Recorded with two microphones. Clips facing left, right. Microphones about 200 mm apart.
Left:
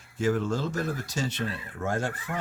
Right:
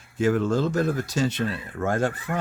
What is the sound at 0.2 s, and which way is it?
Speech, 55° right (ahead or behind).